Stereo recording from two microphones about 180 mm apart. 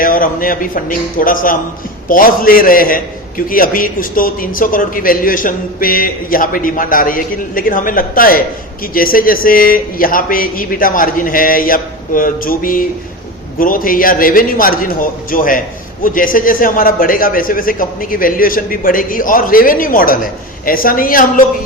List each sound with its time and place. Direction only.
0.0 s a man's voice: 50° left (ahead or behind)